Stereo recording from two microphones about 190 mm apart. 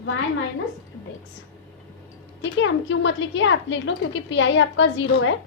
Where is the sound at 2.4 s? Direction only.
85° left.